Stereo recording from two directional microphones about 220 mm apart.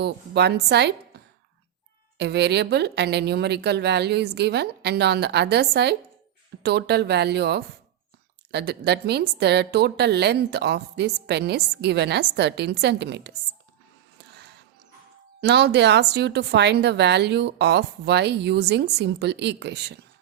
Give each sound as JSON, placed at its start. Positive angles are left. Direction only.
{"t": 0.0, "sound": "a woman's voice", "side_deg": -50}
{"t": 2.1, "sound": "a woman's voice", "side_deg": -50}
{"t": 14.2, "sound": "music", "side_deg": -50}
{"t": 15.4, "sound": "a woman's voice", "side_deg": -50}